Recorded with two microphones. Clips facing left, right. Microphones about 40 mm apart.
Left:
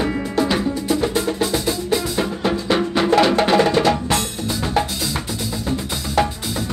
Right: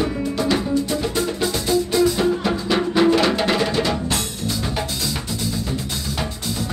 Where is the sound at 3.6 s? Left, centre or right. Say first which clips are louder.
Left 5 dB; left.